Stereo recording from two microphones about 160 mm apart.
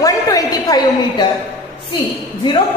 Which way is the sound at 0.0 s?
25° left (ahead or behind).